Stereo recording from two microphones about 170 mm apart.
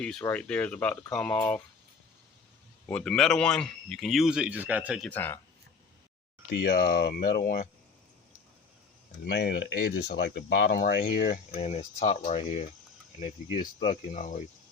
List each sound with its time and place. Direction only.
0.0 s speech: 5° left (ahead or behind)
2.8 s speech: 5° left (ahead or behind)
5.0 s speech: 10° left (ahead or behind)
6.6 s speech: 70° left (ahead or behind)
9.2 s speech: 90° left
10.8 s speech: 65° left (ahead or behind)
11.5 s speech: 40° left (ahead or behind)